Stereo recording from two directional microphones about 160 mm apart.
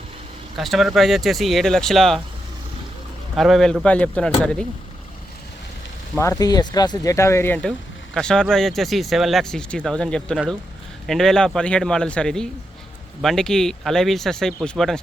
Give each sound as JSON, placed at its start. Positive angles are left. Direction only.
{"t": 0.5, "sound": "speech", "side_deg": 0}
{"t": 3.3, "sound": "speech", "side_deg": 0}
{"t": 6.1, "sound": "speech", "side_deg": 20}